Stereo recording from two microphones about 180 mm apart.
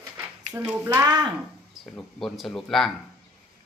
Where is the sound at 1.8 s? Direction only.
Centre (ahead or behind).